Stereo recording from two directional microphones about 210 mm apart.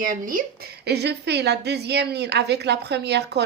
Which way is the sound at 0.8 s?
50° right (ahead or behind).